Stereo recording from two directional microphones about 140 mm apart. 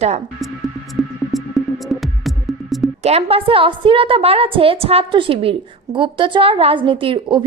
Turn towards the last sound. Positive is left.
turn(degrees=-35)  # may be behind; listen again after turning